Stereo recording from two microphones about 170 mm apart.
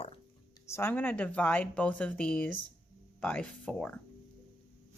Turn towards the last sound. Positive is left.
turn(degrees=5)  # may be behind; listen again after turning